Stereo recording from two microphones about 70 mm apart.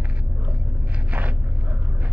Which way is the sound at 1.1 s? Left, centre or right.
Right.